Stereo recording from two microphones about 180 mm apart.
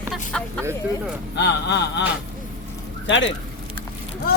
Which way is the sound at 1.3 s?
70° left (ahead or behind).